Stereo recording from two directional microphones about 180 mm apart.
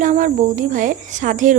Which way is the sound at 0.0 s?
45° right (ahead or behind).